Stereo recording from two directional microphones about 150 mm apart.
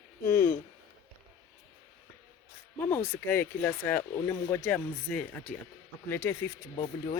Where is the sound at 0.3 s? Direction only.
15° left (ahead or behind).